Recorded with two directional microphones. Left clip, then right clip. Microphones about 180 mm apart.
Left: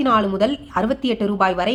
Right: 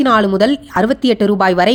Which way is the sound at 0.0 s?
35° right (ahead or behind).